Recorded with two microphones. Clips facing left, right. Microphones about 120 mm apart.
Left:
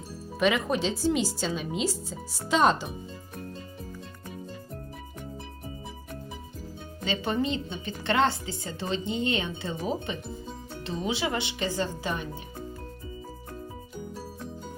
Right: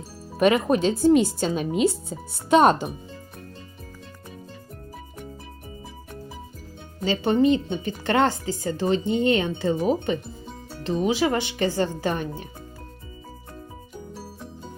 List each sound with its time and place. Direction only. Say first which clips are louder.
0.3 s speech: right 6 dB; 50° right (ahead or behind)
7.0 s speech: right 8 dB; 35° right (ahead or behind)
9.0 s speech: right 6 dB; 25° left (ahead or behind)
9.3 s speech: right 8 dB; 50° right (ahead or behind)